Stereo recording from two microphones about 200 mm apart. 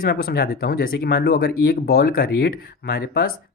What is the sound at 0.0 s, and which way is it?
Speech, 50° left (ahead or behind).